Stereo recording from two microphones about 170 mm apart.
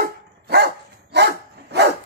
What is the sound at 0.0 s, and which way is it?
Dog, 75° right (ahead or behind).